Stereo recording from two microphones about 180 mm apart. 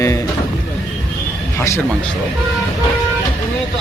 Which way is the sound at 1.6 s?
10° left (ahead or behind).